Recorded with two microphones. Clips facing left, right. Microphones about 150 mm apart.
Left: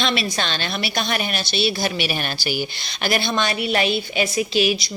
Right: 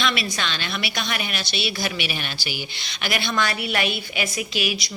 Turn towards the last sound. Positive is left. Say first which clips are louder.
# left 7 dB
turn(degrees=30)  # may be behind; listen again after turning